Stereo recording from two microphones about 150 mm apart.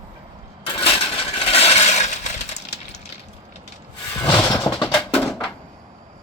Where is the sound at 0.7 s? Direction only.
35° left (ahead or behind); by 2.6 s 50° left (ahead or behind).